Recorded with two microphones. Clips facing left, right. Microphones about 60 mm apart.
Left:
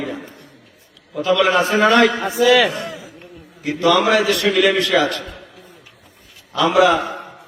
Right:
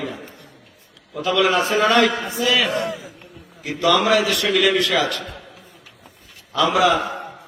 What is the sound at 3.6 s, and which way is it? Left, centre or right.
A man's voice, left.